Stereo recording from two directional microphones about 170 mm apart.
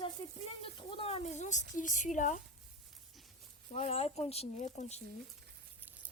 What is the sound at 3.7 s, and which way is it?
Speech, 40° left (ahead or behind).